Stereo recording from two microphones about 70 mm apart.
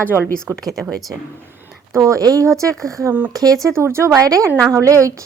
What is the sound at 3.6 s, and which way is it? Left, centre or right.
A woman's voice, right.